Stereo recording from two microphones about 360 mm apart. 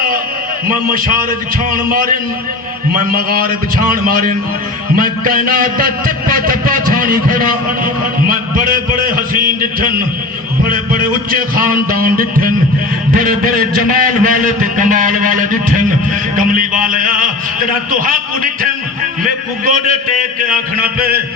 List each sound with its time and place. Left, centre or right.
0.7 s a man's voice: right
16.4 s a sound: right
18.0 s a man's voice: right